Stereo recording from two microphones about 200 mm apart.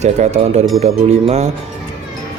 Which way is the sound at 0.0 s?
35° right (ahead or behind).